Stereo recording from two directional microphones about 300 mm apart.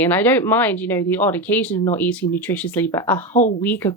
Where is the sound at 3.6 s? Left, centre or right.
Centre.